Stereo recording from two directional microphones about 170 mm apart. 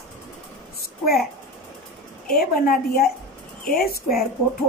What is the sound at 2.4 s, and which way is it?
A woman's voice, 60° left (ahead or behind).